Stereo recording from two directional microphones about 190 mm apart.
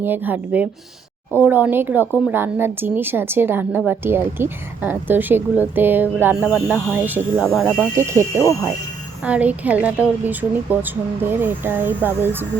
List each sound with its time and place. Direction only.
0.0 s speech: 10° right (ahead or behind)
7.9 s speech: 15° right (ahead or behind)